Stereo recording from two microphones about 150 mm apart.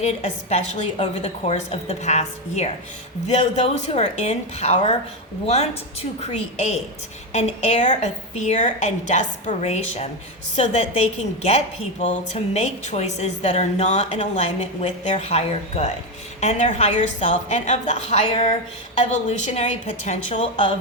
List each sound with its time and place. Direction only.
0.0 s a woman's voice: 50° left (ahead or behind)